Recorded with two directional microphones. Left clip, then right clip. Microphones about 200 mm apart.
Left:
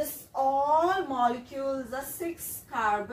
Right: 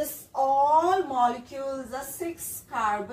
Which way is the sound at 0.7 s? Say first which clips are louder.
Right 3 dB; centre (ahead or behind).